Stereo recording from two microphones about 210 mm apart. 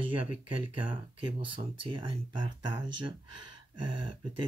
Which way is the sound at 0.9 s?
25° right (ahead or behind).